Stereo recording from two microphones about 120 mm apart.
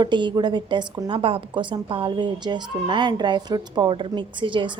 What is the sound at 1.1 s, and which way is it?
A woman's voice, 50° right (ahead or behind).